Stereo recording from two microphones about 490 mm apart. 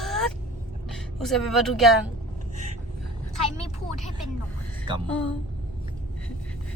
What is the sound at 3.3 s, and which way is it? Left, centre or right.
Speech, right.